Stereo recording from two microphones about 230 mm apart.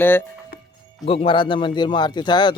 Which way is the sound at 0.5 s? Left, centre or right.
Left.